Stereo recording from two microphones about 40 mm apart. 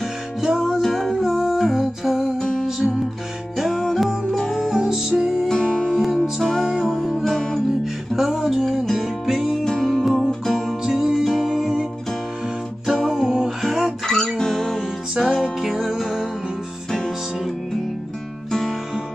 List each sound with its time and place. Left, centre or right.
0.7 s music: centre
1.2 s humming: centre
2.3 s music: centre
3.5 s music: centre
4.3 s music: centre
4.6 s music: centre
5.5 s music: centre
6.4 s music: centre
7.8 s music: centre
9.7 s music: centre
10.8 s music: centre
14.0 s music: centre